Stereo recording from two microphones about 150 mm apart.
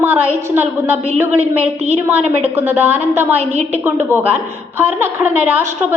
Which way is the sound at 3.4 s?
50° right (ahead or behind).